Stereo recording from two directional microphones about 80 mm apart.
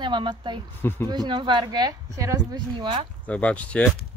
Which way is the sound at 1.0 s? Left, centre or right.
Right.